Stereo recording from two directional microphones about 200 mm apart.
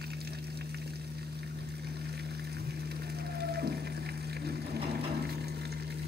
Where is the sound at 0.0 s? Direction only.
50° right (ahead or behind).